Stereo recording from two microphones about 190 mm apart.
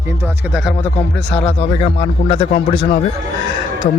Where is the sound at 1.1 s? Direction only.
5° left (ahead or behind).